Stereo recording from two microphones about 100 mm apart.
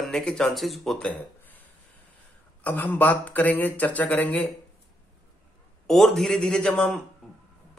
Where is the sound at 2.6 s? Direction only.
15° left (ahead or behind).